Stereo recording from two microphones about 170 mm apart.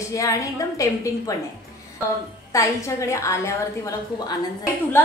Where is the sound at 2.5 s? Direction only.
20° left (ahead or behind).